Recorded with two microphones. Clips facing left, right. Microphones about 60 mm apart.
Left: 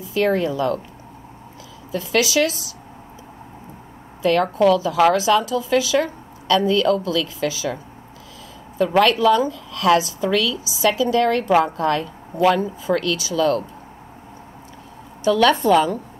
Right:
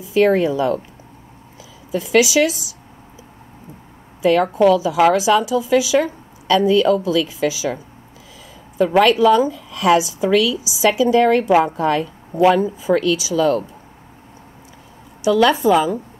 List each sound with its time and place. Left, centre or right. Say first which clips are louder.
0.1 s speech: right 5 dB; right
1.9 s speech: right 5 dB; centre
4.2 s a woman's voice: right 3 dB; centre
9.0 s a woman's voice: right 3 dB; centre
15.2 s a woman's voice: right 2 dB; centre